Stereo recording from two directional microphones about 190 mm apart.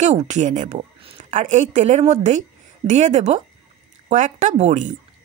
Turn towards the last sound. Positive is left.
turn(degrees=-40)  # may be behind; listen again after turning